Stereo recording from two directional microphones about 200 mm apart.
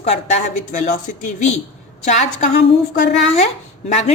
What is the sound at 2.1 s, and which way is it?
Speech, 35° left (ahead or behind).